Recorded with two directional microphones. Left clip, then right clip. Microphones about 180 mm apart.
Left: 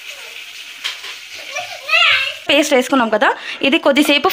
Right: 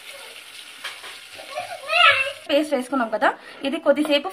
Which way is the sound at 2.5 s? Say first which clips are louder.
Left 10 dB; 35° left (ahead or behind).